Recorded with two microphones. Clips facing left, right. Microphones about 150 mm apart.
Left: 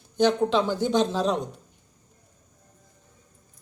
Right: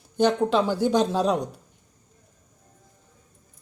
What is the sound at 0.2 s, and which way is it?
Speech, 10° right (ahead or behind).